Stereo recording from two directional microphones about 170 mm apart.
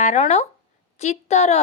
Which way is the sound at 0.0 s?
45° left (ahead or behind).